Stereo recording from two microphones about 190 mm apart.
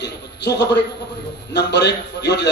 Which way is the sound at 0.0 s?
65° left (ahead or behind).